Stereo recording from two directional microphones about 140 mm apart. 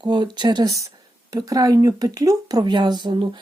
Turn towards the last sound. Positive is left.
turn(degrees=-35)  # may be behind; listen again after turning